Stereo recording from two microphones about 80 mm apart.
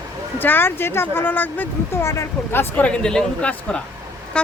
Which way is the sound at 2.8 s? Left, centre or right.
Centre.